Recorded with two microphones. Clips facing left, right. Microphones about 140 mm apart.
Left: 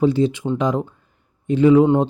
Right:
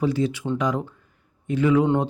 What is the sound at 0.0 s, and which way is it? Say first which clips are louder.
Speech: left 6 dB; 25° left (ahead or behind).